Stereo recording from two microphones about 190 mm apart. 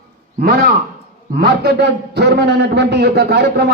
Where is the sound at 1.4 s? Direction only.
60° right (ahead or behind).